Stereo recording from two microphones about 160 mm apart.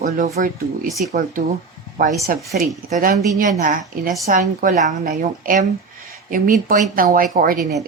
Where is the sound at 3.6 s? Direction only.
60° right (ahead or behind).